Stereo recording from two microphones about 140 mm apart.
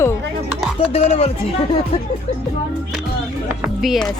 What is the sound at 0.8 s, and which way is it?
Music, 45° left (ahead or behind).